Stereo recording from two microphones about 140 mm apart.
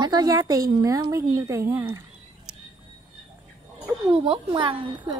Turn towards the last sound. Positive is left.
turn(degrees=-35)  # may be behind; listen again after turning